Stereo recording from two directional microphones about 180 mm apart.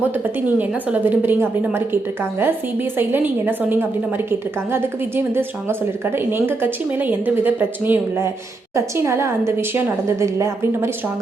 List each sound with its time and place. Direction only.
0.4 s a woman's voice: 10° right (ahead or behind)